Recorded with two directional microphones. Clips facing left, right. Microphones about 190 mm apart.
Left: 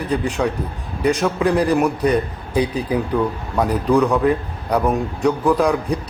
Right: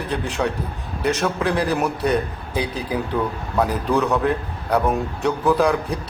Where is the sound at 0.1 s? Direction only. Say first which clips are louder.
Left 4 dB; 10° left (ahead or behind).